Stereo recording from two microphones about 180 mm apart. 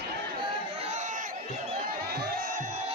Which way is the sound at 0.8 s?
40° right (ahead or behind).